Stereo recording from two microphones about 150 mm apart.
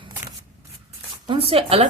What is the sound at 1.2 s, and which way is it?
Speech, 35° right (ahead or behind).